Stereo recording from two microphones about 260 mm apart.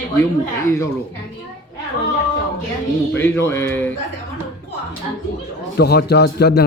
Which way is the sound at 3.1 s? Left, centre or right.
Centre.